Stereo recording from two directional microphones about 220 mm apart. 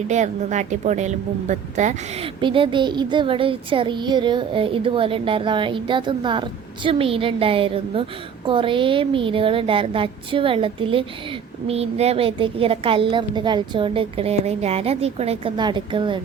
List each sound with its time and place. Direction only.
0.1 s a woman's voice: 30° right (ahead or behind)